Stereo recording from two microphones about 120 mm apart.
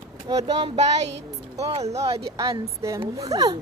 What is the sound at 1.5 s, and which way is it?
Speech, 55° right (ahead or behind).